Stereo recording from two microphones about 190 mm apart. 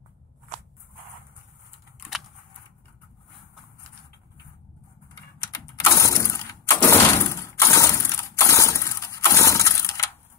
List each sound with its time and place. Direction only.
5.4 s mechanisms: 15° left (ahead or behind)